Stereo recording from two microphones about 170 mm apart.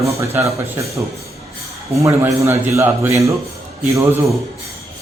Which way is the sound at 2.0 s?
15° right (ahead or behind).